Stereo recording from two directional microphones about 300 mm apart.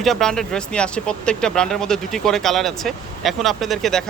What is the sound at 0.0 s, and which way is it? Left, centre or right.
Speech, centre.